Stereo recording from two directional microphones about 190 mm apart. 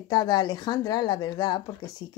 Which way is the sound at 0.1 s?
20° left (ahead or behind).